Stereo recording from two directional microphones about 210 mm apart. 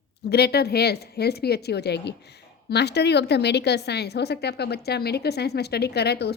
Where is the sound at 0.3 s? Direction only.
50° left (ahead or behind).